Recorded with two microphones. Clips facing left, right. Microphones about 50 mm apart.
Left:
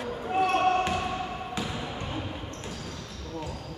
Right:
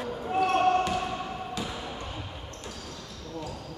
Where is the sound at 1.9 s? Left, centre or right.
Left.